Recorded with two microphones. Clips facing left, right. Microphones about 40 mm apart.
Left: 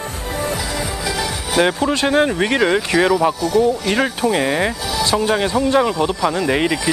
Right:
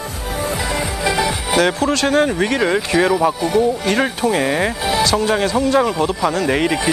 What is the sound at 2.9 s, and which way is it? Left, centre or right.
Speech, centre.